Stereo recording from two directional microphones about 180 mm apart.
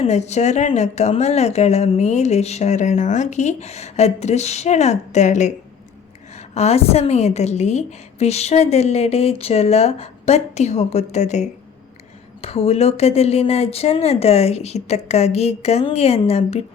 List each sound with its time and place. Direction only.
0.0 s speech: 40° left (ahead or behind)